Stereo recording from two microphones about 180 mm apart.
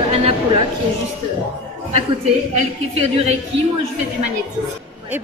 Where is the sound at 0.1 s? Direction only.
35° right (ahead or behind).